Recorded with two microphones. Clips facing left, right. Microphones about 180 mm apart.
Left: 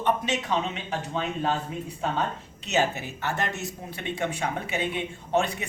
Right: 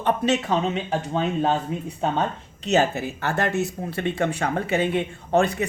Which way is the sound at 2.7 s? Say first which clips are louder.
Right 5 dB; 55° right (ahead or behind).